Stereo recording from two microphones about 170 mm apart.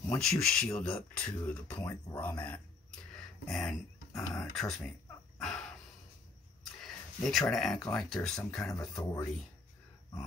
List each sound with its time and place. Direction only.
0.2 s speech: centre (ahead or behind)
5.4 s a sound: 5° left (ahead or behind)
7.9 s speech: 5° left (ahead or behind)
8.6 s speech: 20° left (ahead or behind)